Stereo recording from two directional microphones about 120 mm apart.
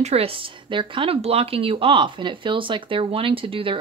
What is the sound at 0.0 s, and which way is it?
Speech, 55° right (ahead or behind).